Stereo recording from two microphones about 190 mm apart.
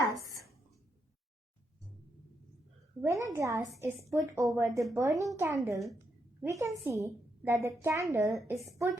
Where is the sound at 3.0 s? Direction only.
15° right (ahead or behind).